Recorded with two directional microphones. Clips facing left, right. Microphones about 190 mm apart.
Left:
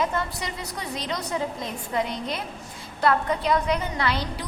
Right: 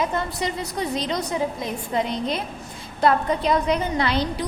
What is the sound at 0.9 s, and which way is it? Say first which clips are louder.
A woman's voice: right 1 dB; 25° right (ahead or behind).